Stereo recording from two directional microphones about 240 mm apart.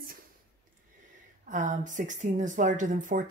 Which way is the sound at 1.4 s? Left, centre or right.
Right.